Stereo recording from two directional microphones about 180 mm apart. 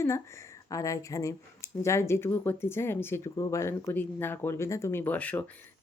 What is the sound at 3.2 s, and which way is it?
Speech, 25° left (ahead or behind).